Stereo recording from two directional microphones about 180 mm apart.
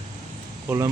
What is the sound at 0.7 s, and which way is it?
Speech, 15° right (ahead or behind).